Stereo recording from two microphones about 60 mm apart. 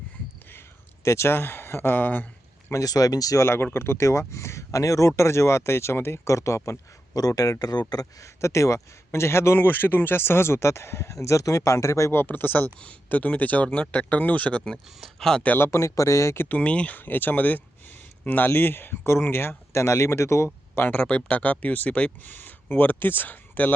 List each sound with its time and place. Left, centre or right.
1.0 s speech: left
2.7 s speech: left
3.4 s speech: left
8.4 s speech: left
9.6 s speech: left
12.2 s speech: left
15.2 s speech: centre
15.5 s speech: left
16.5 s speech: left
20.9 s speech: left